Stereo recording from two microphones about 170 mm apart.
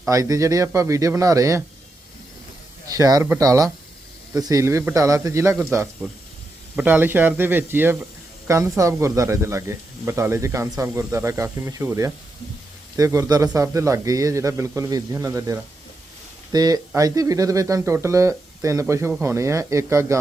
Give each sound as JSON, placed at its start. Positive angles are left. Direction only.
{"t": 0.0, "sound": "a man's voice", "side_deg": -20}
{"t": 2.9, "sound": "a man's voice", "side_deg": -20}
{"t": 6.7, "sound": "a man's voice", "side_deg": -10}